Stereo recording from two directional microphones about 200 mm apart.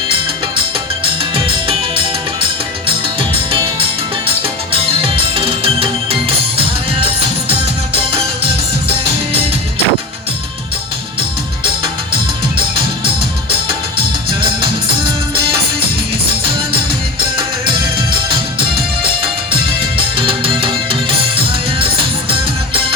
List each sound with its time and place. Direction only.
2.8 s music: 25° right (ahead or behind)
20.1 s music: 25° right (ahead or behind)
22.3 s music: 25° right (ahead or behind)